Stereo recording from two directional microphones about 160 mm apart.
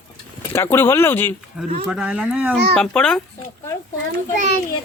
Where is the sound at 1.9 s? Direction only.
5° right (ahead or behind).